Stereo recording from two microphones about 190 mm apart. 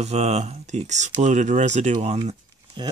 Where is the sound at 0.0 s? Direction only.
35° right (ahead or behind).